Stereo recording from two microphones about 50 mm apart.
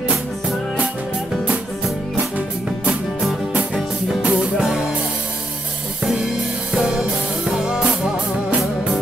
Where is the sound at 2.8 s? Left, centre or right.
Centre.